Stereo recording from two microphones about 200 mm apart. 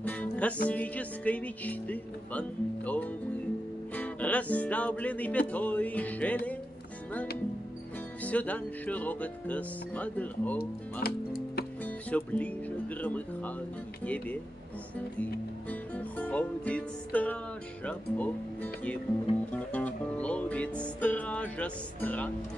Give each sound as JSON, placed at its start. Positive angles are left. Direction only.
{"t": 0.0, "sound": "music", "side_deg": 5}
{"t": 8.2, "sound": "music", "side_deg": 5}
{"t": 10.6, "sound": "speech", "side_deg": 50}
{"t": 11.8, "sound": "speech", "side_deg": 10}
{"t": 14.0, "sound": "music", "side_deg": 5}
{"t": 15.7, "sound": "music", "side_deg": 5}